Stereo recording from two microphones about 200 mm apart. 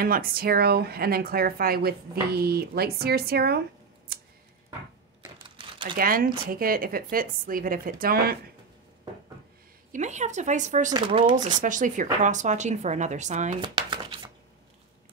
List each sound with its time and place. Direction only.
0.0 s speech: 50° right (ahead or behind)
4.1 s a sound: 50° right (ahead or behind)
5.2 s typing: 25° right (ahead or behind)
5.9 s speech: 45° right (ahead or behind)
9.9 s a woman's voice: 35° right (ahead or behind)
10.9 s speech: 25° right (ahead or behind)
11.6 s a woman's voice: 40° right (ahead or behind)
13.6 s chopping: 20° right (ahead or behind)